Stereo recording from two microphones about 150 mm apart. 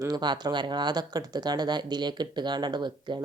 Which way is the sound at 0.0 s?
25° right (ahead or behind).